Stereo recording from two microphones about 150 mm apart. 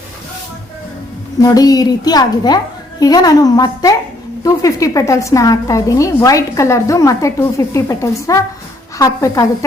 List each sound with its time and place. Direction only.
1.4 s a woman's voice: 25° left (ahead or behind)